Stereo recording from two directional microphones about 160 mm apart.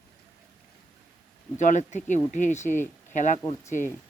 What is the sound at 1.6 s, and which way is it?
Speech, 50° left (ahead or behind).